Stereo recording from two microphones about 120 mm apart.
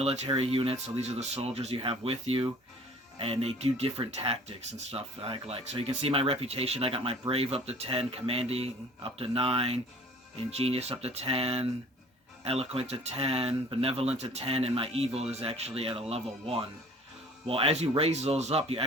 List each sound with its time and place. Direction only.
0.3 s speech: 55° right (ahead or behind)